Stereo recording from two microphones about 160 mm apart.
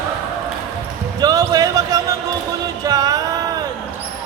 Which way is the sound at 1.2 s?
25° right (ahead or behind).